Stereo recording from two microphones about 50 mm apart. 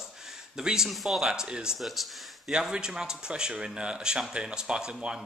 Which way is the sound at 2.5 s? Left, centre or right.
Centre.